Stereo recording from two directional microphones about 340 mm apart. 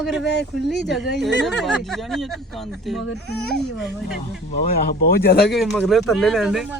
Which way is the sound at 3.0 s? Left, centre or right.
Left.